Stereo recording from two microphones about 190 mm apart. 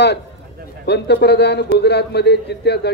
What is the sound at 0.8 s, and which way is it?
A man's voice, 60° left (ahead or behind).